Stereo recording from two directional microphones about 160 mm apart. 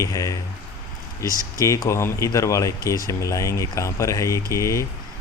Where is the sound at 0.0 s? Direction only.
20° left (ahead or behind).